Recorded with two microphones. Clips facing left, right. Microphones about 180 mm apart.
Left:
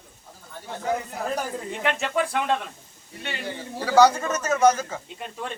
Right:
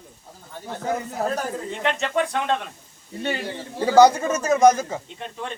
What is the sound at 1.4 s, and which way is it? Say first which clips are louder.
Speech: right 2 dB; 5° left (ahead or behind).